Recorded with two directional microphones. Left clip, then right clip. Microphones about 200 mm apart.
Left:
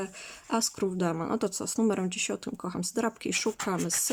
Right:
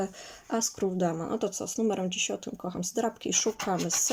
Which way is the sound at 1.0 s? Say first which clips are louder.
Even; 25° left (ahead or behind).